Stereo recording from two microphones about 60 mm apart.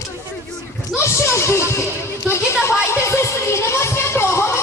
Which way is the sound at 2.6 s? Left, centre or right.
Left.